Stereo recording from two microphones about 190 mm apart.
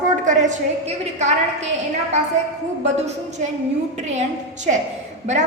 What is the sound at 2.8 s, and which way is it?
A woman's voice, 35° right (ahead or behind).